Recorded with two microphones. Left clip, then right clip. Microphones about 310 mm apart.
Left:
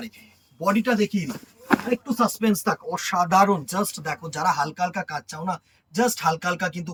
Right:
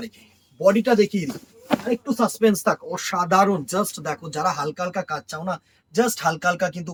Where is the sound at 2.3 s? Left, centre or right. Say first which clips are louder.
Right 5 dB; centre.